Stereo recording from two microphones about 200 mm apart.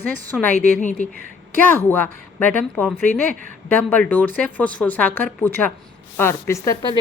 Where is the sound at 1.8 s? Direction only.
10° left (ahead or behind).